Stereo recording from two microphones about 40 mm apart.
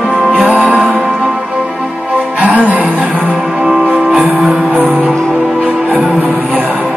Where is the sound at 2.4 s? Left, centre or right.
Right.